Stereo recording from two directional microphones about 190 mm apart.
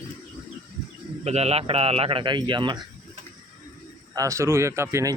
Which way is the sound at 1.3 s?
35° right (ahead or behind).